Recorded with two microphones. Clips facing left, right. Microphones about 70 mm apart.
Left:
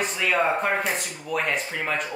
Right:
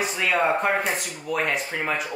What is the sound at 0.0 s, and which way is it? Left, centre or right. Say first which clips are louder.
Speech: right 1 dB; centre.